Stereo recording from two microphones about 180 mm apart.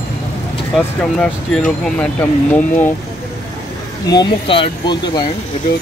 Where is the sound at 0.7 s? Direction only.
Centre (ahead or behind).